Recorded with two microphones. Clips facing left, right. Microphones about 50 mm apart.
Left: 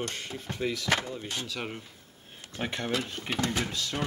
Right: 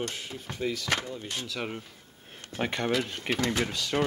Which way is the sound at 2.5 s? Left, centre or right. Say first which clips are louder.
Right 4 dB; centre.